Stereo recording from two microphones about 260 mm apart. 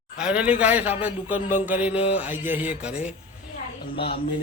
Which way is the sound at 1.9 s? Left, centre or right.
Left.